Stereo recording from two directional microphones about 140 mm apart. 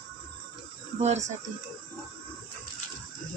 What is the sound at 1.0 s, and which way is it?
Speech, 55° right (ahead or behind).